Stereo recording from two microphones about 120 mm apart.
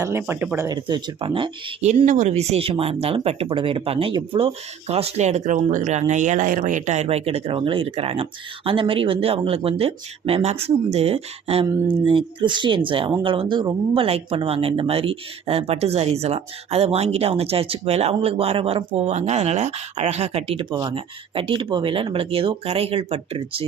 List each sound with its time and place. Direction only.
0.0 s speech: 20° right (ahead or behind)
0.7 s speech: 35° right (ahead or behind)
2.0 s speech: 80° right; by 11.6 s 55° right (ahead or behind)
12.0 s speech: 45° right (ahead or behind)